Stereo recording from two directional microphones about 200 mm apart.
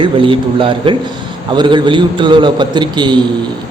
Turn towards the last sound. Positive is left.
turn(degrees=-20)  # may be behind; listen again after turning